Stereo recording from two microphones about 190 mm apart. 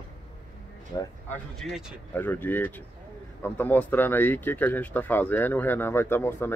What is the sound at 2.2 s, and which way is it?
Speech, 10° left (ahead or behind).